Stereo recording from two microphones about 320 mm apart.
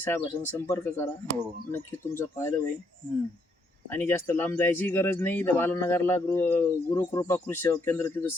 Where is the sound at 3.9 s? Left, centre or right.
Centre.